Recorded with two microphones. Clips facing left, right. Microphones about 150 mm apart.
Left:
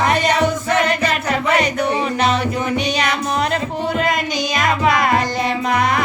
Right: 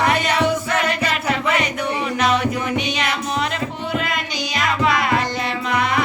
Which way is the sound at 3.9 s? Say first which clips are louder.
Left 6 dB; 40° left (ahead or behind).